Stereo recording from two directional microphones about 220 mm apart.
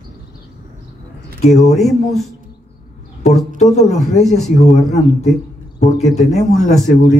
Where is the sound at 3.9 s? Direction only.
Centre (ahead or behind).